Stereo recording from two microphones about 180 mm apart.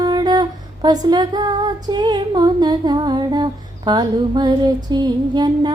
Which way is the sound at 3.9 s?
25° right (ahead or behind).